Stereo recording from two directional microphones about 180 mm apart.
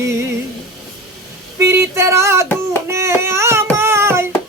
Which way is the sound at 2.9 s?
15° right (ahead or behind).